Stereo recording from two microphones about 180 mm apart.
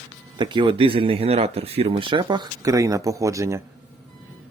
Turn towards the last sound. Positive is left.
turn(degrees=-15)  # may be behind; listen again after turning